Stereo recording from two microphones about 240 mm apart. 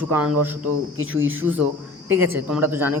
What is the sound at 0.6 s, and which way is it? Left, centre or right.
Speech, right.